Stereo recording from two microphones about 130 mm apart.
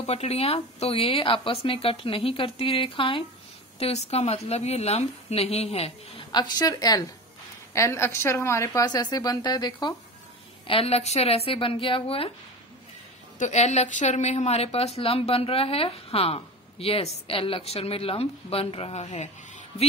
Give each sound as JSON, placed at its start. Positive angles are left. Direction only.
{"t": 0.0, "sound": "a woman's voice", "side_deg": 55}
{"t": 3.8, "sound": "a woman's voice", "side_deg": 55}
{"t": 6.3, "sound": "a woman's voice", "side_deg": 30}
{"t": 10.7, "sound": "a woman's voice", "side_deg": 50}
{"t": 13.4, "sound": "a woman's voice", "side_deg": 60}